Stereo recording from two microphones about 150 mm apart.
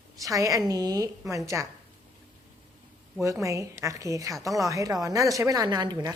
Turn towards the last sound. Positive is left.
turn(degrees=-25)  # may be behind; listen again after turning